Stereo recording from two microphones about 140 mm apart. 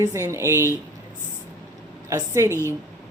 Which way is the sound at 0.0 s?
20° right (ahead or behind).